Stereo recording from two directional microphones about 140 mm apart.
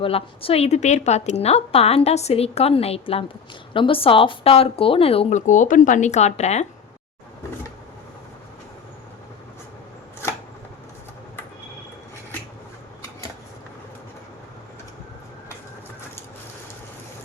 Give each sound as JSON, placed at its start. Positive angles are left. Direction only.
{"t": 0.0, "sound": "a woman's voice", "side_deg": 40}
{"t": 5.5, "sound": "speech", "side_deg": 65}